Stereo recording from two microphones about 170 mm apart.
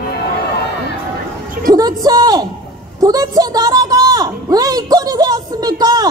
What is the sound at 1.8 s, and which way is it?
A woman's voice, 20° right (ahead or behind).